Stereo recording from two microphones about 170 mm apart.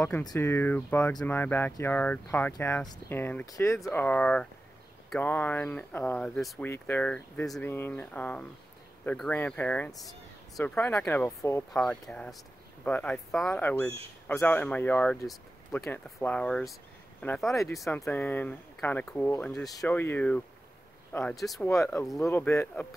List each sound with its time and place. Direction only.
0.2 s speech: 20° left (ahead or behind)
11.7 s speech: 5° left (ahead or behind)
18.0 s speech: 15° left (ahead or behind)
21.4 s speech: centre (ahead or behind)
22.3 s speech: 15° left (ahead or behind)